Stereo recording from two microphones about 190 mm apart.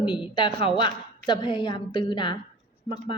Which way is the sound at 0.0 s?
25° left (ahead or behind).